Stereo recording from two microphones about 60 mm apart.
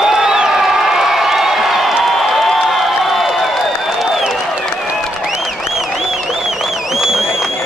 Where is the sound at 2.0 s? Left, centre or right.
Centre.